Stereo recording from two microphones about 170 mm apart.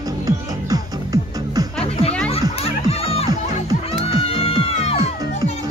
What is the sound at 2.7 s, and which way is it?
Music, 35° left (ahead or behind).